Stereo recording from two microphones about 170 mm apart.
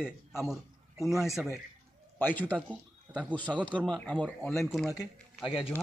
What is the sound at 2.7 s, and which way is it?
Speech, 5° right (ahead or behind).